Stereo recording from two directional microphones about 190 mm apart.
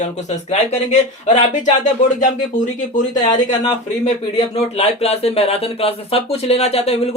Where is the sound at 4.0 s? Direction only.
35° left (ahead or behind).